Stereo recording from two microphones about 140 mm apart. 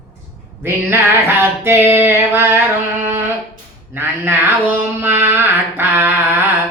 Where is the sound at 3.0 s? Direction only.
15° right (ahead or behind).